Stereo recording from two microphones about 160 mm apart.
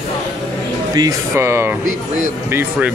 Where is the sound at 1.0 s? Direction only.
20° right (ahead or behind).